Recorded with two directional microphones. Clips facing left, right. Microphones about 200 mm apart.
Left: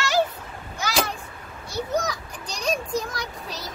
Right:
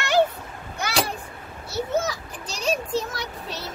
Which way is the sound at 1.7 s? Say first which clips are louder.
Right 1 dB; 5° right (ahead or behind).